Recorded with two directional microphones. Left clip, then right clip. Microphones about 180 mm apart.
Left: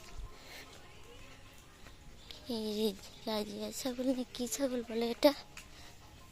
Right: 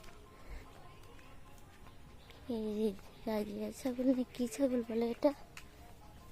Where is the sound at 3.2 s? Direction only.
25° right (ahead or behind).